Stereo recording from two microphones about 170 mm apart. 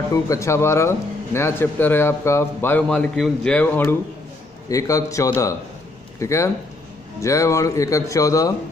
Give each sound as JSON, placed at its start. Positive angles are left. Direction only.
{"t": 0.1, "sound": "a man's voice", "side_deg": 20}